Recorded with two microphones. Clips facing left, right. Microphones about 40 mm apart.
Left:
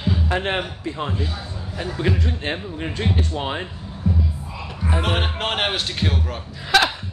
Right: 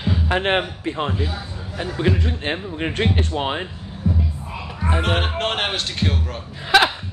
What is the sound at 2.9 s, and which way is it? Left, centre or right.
Speech, right.